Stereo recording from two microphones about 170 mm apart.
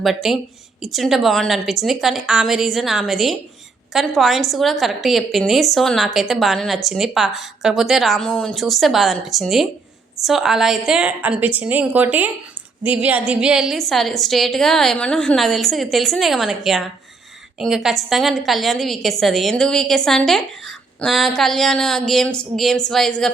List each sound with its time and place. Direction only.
0.0 s a woman's voice: centre (ahead or behind)